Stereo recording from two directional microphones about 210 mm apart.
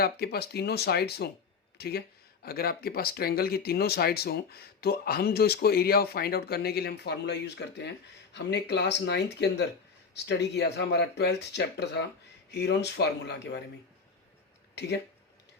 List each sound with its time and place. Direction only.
0.0 s speech: 50° left (ahead or behind)